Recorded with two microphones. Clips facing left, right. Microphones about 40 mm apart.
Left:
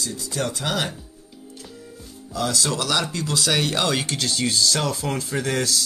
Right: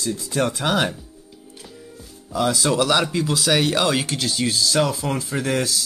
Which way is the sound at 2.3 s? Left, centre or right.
Centre.